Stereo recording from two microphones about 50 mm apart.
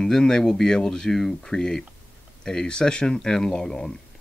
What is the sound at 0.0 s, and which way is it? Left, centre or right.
Speech, centre.